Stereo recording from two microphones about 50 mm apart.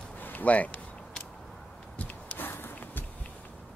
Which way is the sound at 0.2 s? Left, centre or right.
Left.